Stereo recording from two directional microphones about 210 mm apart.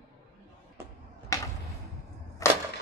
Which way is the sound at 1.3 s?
15° left (ahead or behind).